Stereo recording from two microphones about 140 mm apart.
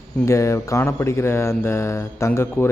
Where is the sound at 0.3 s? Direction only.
20° left (ahead or behind).